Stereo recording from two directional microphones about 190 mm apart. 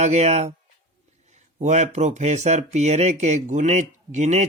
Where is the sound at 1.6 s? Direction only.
40° right (ahead or behind).